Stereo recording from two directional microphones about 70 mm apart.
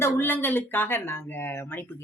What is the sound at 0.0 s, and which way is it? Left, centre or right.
A woman's voice, left.